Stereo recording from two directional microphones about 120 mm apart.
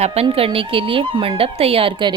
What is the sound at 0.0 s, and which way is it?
A woman's voice, 60° right (ahead or behind).